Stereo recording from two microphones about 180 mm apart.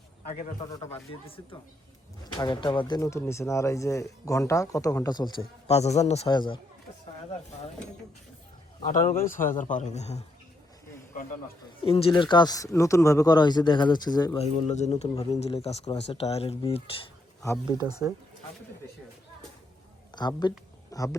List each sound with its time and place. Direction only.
0.7 s speech: 20° left (ahead or behind)
2.2 s speech: 25° left (ahead or behind)
5.6 s speech: 35° left (ahead or behind)
6.3 s speech: 25° left (ahead or behind)
8.9 s a man's voice: 45° left (ahead or behind)
11.9 s speech: 30° left (ahead or behind)
14.3 s speech: 40° left (ahead or behind)
17.7 s speech: 25° right (ahead or behind)
20.1 s speech: 25° left (ahead or behind)